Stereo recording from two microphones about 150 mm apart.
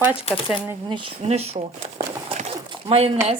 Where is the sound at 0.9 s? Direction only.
45° right (ahead or behind).